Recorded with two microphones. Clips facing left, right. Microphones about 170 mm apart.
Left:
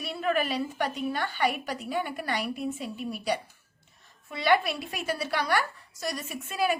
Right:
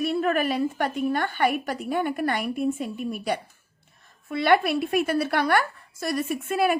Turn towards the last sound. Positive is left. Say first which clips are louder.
# right 5 dB
turn(degrees=-55)  # may be behind; listen again after turning